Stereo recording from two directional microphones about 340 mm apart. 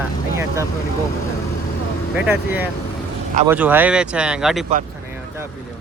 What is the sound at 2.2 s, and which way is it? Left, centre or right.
Speech, centre.